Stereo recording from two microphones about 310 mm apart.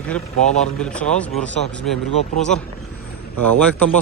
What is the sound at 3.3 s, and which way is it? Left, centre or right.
Speech, right.